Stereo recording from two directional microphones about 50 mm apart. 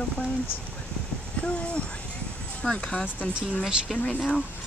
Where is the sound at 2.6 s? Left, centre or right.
Centre.